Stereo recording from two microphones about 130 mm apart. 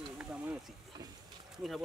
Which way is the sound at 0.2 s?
10° right (ahead or behind).